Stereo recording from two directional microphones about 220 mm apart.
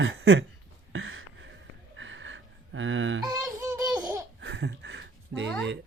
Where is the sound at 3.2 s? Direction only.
15° right (ahead or behind).